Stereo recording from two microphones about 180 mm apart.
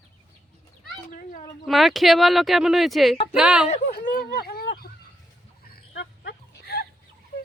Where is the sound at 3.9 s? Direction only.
55° left (ahead or behind).